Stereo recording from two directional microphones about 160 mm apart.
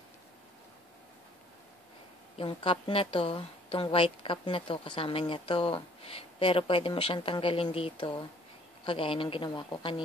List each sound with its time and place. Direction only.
2.3 s a woman's voice: 35° left (ahead or behind)